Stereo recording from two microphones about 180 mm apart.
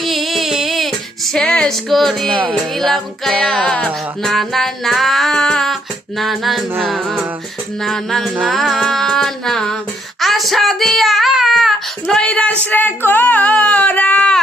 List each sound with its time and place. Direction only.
0.0 s female singing: centre (ahead or behind)
2.3 s music: 30° right (ahead or behind)
2.7 s music: centre (ahead or behind)
10.2 s child singing: centre (ahead or behind)
12.6 s speech: 10° left (ahead or behind)